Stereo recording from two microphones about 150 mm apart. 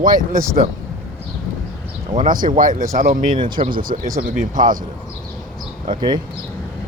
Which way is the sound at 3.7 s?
70° right (ahead or behind).